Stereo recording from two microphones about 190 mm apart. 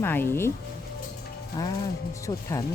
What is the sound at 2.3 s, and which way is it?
Speech, 25° left (ahead or behind).